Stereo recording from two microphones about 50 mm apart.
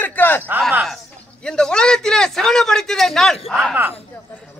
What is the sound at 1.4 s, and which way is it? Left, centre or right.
A man's voice, centre.